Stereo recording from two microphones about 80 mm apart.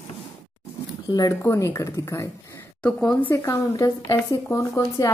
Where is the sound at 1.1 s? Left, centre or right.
Left.